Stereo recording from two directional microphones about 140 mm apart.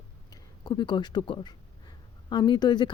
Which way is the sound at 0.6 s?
30° left (ahead or behind).